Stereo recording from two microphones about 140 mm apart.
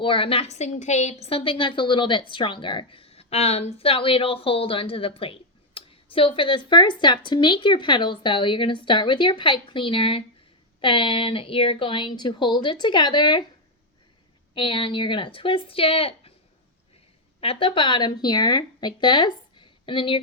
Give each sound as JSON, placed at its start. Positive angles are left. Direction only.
{"t": 0.0, "sound": "a woman's voice", "side_deg": 40}
{"t": 14.5, "sound": "a woman's voice", "side_deg": 40}
{"t": 17.4, "sound": "speech", "side_deg": 40}